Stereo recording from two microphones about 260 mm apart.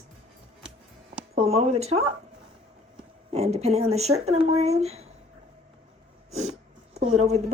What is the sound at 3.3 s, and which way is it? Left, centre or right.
A woman's voice, right.